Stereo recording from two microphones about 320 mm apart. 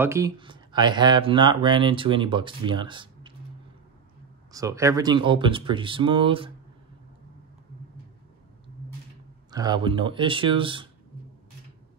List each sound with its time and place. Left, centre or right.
0.0 s speech: centre
4.5 s speech: centre
9.5 s speech: centre